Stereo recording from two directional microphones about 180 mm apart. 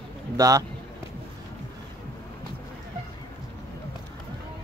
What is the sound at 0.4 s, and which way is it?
Speech, 20° right (ahead or behind).